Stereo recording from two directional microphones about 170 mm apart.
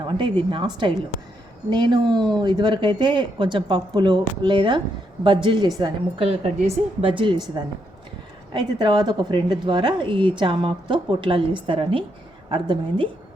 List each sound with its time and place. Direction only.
0.5 s a woman's voice: 30° right (ahead or behind)
7.2 s a woman's voice: 25° right (ahead or behind)